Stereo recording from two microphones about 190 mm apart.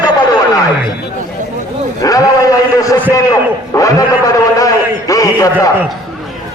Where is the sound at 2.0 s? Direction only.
15° left (ahead or behind).